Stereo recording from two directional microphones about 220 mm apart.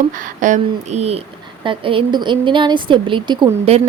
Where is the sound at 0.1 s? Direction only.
35° right (ahead or behind).